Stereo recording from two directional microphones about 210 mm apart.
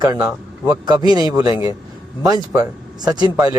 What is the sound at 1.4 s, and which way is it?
Speech, 25° left (ahead or behind).